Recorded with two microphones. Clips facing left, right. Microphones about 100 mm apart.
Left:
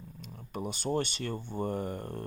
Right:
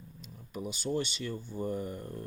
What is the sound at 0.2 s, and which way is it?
Speech, 55° left (ahead or behind).